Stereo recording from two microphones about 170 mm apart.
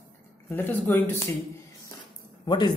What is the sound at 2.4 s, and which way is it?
Speech, 25° left (ahead or behind).